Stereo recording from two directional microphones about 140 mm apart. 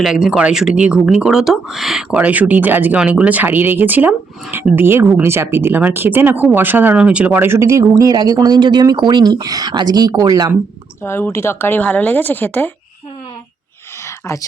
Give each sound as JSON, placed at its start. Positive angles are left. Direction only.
{"t": 0.0, "sound": "speech", "side_deg": -5}
{"t": 11.0, "sound": "speech", "side_deg": 15}